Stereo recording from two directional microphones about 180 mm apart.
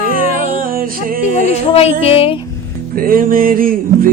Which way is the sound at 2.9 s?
50° right (ahead or behind).